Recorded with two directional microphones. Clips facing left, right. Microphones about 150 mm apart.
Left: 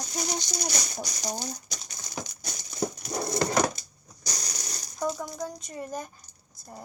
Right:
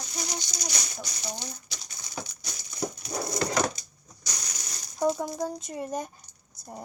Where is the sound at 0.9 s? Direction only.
40° left (ahead or behind).